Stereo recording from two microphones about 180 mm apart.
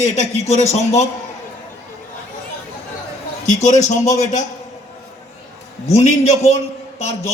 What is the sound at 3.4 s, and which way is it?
A man's voice, 40° left (ahead or behind).